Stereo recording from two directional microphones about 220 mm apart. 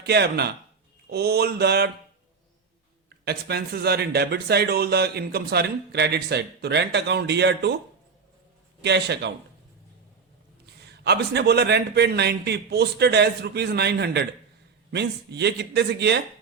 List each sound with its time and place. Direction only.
0.0 s speech: 50° right (ahead or behind)
3.2 s speech: 45° right (ahead or behind)
8.8 s speech: 50° right (ahead or behind)
11.0 s speech: 50° right (ahead or behind)